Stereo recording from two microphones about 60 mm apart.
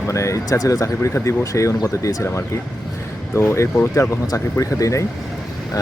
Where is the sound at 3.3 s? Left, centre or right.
Left.